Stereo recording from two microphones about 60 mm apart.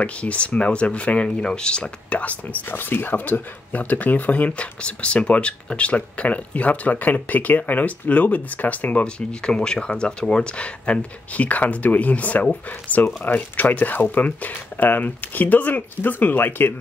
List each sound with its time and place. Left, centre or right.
0.0 s speech: left